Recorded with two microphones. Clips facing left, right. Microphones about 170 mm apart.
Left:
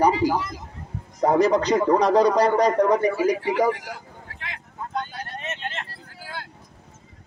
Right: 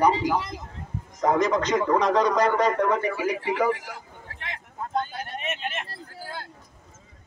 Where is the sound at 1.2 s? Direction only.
35° left (ahead or behind).